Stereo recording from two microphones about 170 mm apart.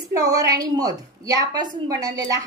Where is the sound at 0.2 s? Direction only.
20° right (ahead or behind).